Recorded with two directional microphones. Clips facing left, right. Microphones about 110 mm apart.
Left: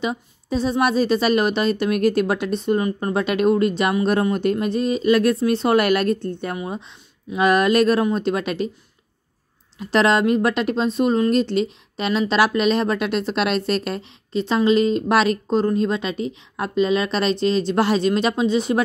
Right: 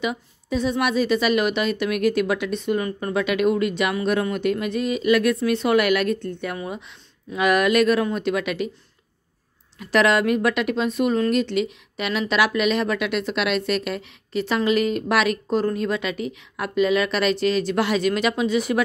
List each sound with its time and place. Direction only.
0.0 s a woman's voice: 30° left (ahead or behind)
9.8 s a woman's voice: 30° left (ahead or behind)